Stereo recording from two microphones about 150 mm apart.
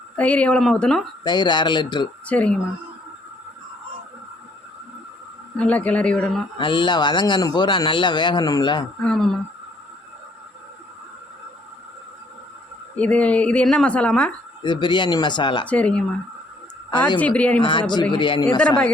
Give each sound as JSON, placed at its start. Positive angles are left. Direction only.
{"t": 0.2, "sound": "a woman's voice", "side_deg": 10}
{"t": 1.2, "sound": "speech", "side_deg": 30}
{"t": 2.2, "sound": "a woman's voice", "side_deg": 10}
{"t": 5.5, "sound": "a woman's voice", "side_deg": 10}
{"t": 6.6, "sound": "a man's voice", "side_deg": 35}
{"t": 9.0, "sound": "speech", "side_deg": 5}
{"t": 13.0, "sound": "a woman's voice", "side_deg": 10}
{"t": 14.6, "sound": "a man's voice", "side_deg": 30}
{"t": 15.6, "sound": "a woman's voice", "side_deg": 10}
{"t": 17.2, "sound": "a woman's voice", "side_deg": 10}
{"t": 17.6, "sound": "a man's voice", "side_deg": 30}